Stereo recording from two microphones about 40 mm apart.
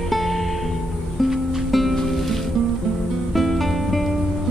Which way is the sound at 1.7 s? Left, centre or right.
Centre.